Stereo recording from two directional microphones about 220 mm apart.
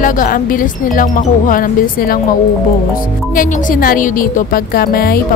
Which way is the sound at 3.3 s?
40° left (ahead or behind).